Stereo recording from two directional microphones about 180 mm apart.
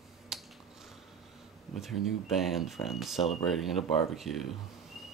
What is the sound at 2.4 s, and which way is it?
Speech, centre (ahead or behind).